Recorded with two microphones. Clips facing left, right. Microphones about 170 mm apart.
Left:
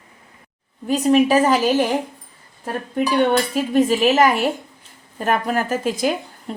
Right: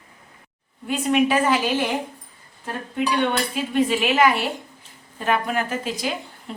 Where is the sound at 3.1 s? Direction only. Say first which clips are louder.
Left 8 dB; 45° left (ahead or behind).